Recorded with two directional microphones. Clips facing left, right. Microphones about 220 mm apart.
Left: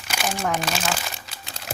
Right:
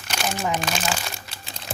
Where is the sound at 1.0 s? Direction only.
Centre (ahead or behind).